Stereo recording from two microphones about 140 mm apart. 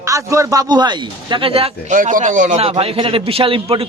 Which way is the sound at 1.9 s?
70° right (ahead or behind).